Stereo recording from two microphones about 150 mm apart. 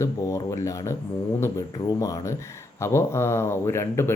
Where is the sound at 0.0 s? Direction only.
20° left (ahead or behind).